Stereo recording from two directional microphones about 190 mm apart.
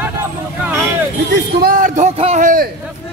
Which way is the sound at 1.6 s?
45° right (ahead or behind).